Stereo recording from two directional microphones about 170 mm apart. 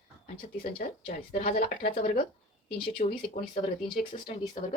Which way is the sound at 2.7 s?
35° left (ahead or behind).